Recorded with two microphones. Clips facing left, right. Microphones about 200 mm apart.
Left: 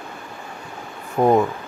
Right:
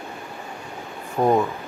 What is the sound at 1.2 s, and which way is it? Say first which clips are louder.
Speech: left 3 dB; 15° left (ahead or behind).